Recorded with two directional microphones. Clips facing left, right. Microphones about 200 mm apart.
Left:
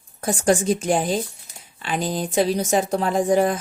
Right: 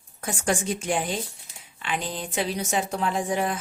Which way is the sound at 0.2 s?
35° left (ahead or behind).